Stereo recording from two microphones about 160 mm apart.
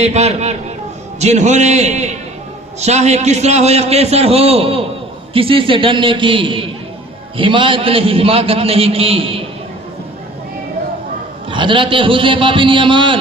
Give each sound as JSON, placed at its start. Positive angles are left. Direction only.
{"t": 0.0, "sound": "a man's voice", "side_deg": -40}
{"t": 11.5, "sound": "a man's voice", "side_deg": -30}